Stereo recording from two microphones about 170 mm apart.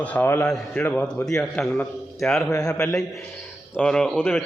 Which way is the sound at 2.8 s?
20° left (ahead or behind).